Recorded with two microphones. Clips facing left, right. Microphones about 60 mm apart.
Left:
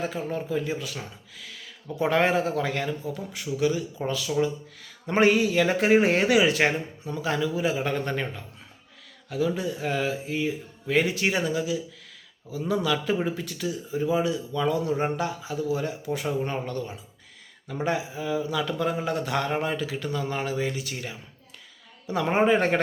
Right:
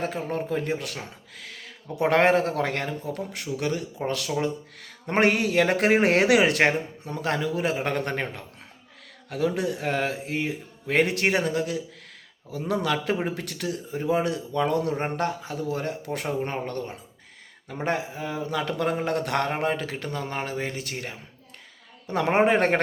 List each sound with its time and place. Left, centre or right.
0.0 s speech: right
1.4 s a sound: right
2.0 s speech: right
9.3 s speech: right
22.1 s speech: right